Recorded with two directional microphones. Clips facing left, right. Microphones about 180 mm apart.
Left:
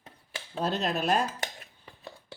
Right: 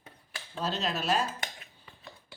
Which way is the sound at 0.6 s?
55° left (ahead or behind).